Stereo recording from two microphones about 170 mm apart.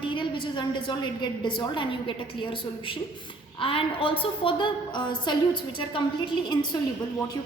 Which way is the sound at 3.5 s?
30° left (ahead or behind).